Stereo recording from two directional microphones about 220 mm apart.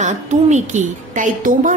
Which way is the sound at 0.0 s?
30° right (ahead or behind).